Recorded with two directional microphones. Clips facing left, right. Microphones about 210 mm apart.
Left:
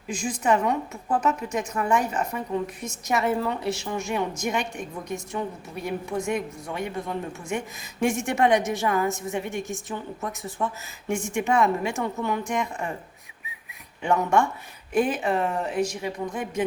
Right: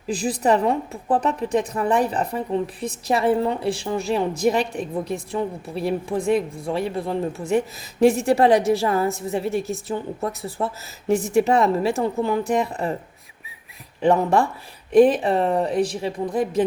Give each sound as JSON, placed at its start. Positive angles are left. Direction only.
{"t": 0.1, "sound": "a woman's voice", "side_deg": -35}
{"t": 14.0, "sound": "a woman's voice", "side_deg": -35}